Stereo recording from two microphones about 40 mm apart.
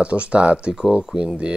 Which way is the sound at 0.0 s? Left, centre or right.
Right.